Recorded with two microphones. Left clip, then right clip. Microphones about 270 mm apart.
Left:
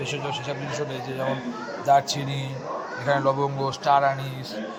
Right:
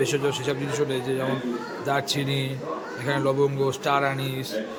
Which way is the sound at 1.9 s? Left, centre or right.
Centre.